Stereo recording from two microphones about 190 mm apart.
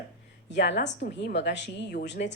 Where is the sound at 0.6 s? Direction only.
65° left (ahead or behind).